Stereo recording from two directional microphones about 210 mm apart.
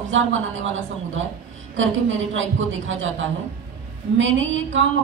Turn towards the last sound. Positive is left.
turn(degrees=-65)  # may be behind; listen again after turning